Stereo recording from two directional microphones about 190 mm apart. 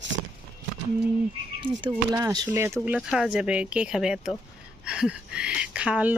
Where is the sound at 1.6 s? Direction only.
25° right (ahead or behind).